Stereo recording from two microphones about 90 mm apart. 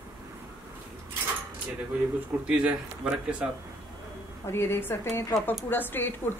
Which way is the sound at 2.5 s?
15° right (ahead or behind).